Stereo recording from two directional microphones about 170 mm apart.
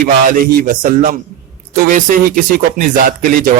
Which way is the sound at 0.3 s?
55° right (ahead or behind).